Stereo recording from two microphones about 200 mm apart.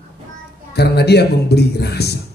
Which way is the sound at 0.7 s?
55° left (ahead or behind).